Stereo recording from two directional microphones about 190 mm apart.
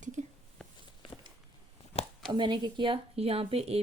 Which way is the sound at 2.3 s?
25° right (ahead or behind).